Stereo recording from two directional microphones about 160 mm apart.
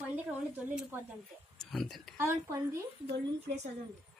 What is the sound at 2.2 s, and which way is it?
Speech, 15° right (ahead or behind).